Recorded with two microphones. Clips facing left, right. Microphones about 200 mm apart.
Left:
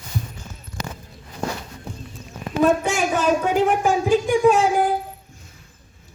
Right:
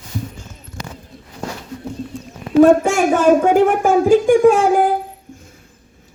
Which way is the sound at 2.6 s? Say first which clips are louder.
Right 8 dB; 50° right (ahead or behind).